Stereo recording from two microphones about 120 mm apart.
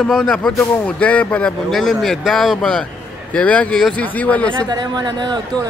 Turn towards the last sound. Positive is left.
turn(degrees=-35)  # may be behind; listen again after turning